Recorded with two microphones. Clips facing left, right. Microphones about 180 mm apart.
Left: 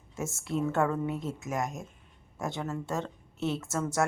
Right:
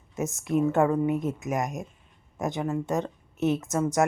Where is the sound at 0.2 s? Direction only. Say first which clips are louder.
Right 6 dB; 20° right (ahead or behind).